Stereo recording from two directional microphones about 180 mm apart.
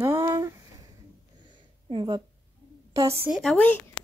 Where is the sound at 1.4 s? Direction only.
25° right (ahead or behind).